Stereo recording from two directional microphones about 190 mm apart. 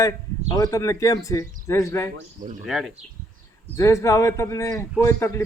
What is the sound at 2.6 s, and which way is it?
Speech, centre (ahead or behind).